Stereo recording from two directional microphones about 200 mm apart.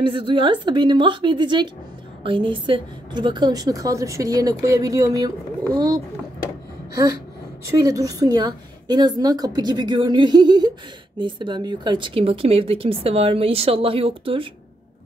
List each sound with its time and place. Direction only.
0.0 s a woman's voice: 25° right (ahead or behind)
7.7 s a woman's voice: 15° right (ahead or behind)